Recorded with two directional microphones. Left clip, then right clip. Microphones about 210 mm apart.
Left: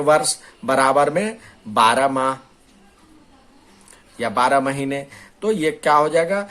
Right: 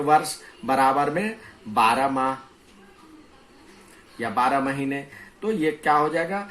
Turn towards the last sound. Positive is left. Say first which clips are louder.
# left 6 dB
turn(degrees=45)  # may be behind; listen again after turning